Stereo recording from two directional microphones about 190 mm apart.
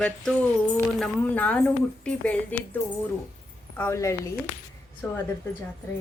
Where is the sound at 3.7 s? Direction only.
15° left (ahead or behind).